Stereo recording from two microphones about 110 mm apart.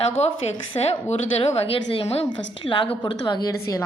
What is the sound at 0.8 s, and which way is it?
A woman's voice, 70° left (ahead or behind).